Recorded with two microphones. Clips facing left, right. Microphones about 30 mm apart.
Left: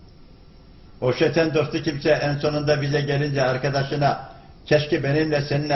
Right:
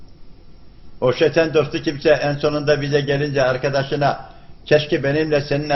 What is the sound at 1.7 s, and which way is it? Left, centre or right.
Speech, right.